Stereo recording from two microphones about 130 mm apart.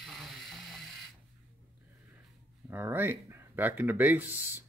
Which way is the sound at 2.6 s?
15° right (ahead or behind).